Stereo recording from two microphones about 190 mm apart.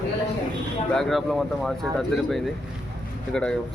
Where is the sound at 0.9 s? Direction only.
Centre (ahead or behind).